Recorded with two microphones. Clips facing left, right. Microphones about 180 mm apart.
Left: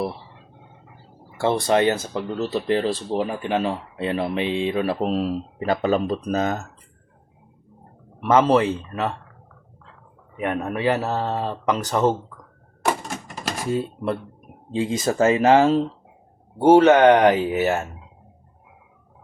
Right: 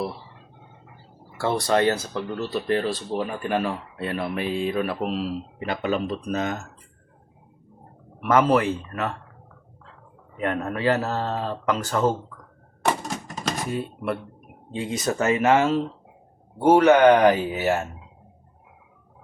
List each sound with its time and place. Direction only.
1.4 s speech: 20° left (ahead or behind); by 6.6 s 35° left (ahead or behind)
8.2 s speech: 25° left (ahead or behind)
10.3 s speech: 15° left (ahead or behind)
13.7 s speech: 30° left (ahead or behind)